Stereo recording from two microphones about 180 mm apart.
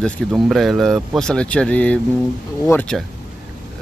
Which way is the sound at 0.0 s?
Centre (ahead or behind).